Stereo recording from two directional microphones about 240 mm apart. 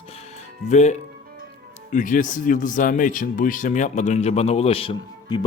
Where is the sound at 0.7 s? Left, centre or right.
Left.